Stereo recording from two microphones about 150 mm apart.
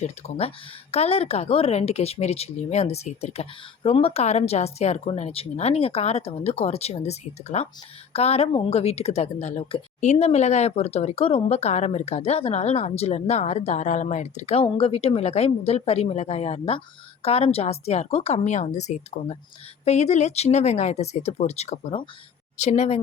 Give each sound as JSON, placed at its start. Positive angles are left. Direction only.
{"t": 0.0, "sound": "speech", "side_deg": 45}